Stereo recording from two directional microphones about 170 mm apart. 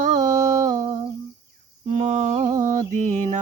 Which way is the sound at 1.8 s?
40° right (ahead or behind).